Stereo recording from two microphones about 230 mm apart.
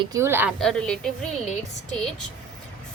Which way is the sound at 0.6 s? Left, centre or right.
Centre.